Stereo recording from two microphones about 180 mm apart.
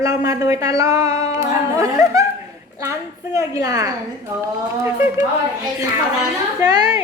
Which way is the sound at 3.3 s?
20° right (ahead or behind).